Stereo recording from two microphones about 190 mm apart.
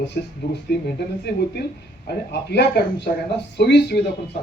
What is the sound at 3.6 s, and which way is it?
Speech, 60° left (ahead or behind).